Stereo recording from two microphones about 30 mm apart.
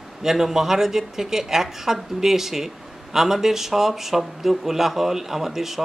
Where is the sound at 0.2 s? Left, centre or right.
Centre.